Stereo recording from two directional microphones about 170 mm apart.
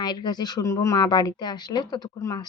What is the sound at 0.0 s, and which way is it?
Speech, 25° left (ahead or behind).